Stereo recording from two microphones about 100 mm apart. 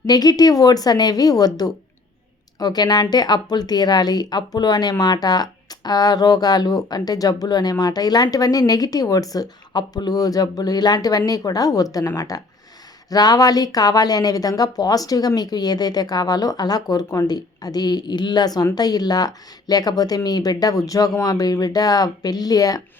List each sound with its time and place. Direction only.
0.0 s speech: 40° left (ahead or behind)